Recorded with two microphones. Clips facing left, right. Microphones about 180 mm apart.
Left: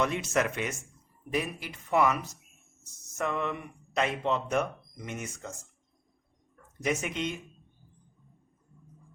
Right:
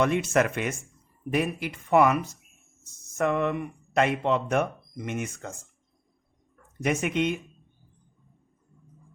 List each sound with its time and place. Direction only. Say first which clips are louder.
0.0 s speech: right 5 dB; 55° right (ahead or behind)
3.2 s speech: right 6 dB; 55° right (ahead or behind)
6.8 s speech: right 5 dB; 60° right (ahead or behind)